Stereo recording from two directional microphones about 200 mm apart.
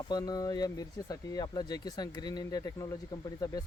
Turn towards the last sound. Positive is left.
turn(degrees=15)  # may be behind; listen again after turning